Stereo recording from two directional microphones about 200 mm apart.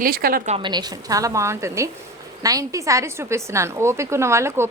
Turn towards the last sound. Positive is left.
turn(degrees=-15)  # may be behind; listen again after turning